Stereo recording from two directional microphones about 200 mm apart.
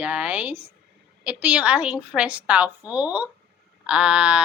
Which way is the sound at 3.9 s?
5° right (ahead or behind).